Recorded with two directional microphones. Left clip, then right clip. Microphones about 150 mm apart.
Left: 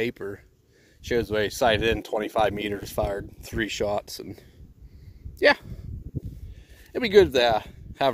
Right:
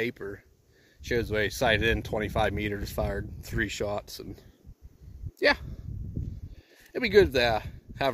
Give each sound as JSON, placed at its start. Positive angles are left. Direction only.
{"t": 0.0, "sound": "speech", "side_deg": 55}
{"t": 6.9, "sound": "speech", "side_deg": 55}